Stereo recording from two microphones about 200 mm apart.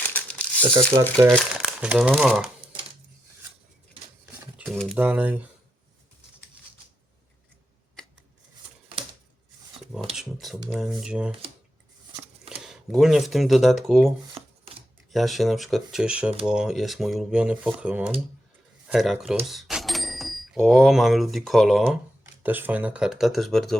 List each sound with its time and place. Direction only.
0.1 s crumpling: 5° left (ahead or behind)
0.8 s speech: 5° left (ahead or behind)
4.4 s a sound: 5° right (ahead or behind)
4.7 s speech: centre (ahead or behind)
8.0 s rub: 5° left (ahead or behind)
10.1 s speech: centre (ahead or behind)
12.5 s speech: centre (ahead or behind)
14.4 s chopping: 30° right (ahead or behind)
15.1 s speech: centre (ahead or behind)